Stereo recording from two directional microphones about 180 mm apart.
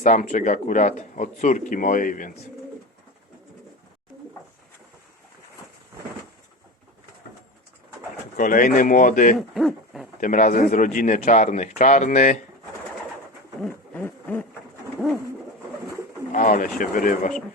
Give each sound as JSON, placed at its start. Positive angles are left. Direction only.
{"t": 0.0, "sound": "a man's voice", "side_deg": 45}
{"t": 8.4, "sound": "a man's voice", "side_deg": 50}
{"t": 9.6, "sound": "hoot", "side_deg": 0}
{"t": 10.2, "sound": "a man's voice", "side_deg": 45}
{"t": 13.6, "sound": "hoot", "side_deg": 10}
{"t": 15.0, "sound": "bird", "side_deg": 0}
{"t": 16.3, "sound": "a man's voice", "side_deg": 45}